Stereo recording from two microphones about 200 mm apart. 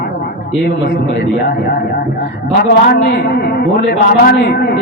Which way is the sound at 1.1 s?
50° left (ahead or behind).